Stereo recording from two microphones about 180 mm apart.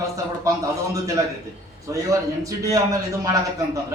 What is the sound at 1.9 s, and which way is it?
Speech, 15° right (ahead or behind).